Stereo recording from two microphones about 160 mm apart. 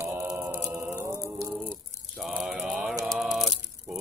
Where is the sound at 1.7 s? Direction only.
Centre (ahead or behind).